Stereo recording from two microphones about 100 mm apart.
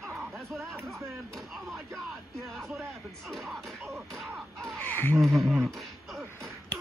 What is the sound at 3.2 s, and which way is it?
Music, centre (ahead or behind).